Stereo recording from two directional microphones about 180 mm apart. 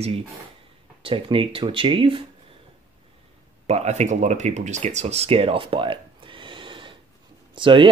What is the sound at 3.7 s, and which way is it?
Speech, 40° right (ahead or behind).